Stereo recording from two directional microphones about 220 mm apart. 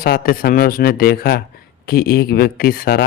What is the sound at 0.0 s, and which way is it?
Speech, 40° left (ahead or behind).